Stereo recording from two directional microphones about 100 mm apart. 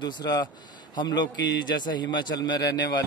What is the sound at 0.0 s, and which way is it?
A man's voice, 45° left (ahead or behind).